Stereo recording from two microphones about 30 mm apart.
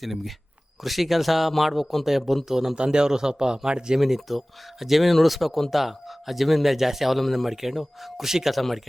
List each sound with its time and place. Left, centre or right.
0.0 s a man's voice: centre
2.7 s speech: right
4.3 s speech: centre
7.5 s a man's voice: centre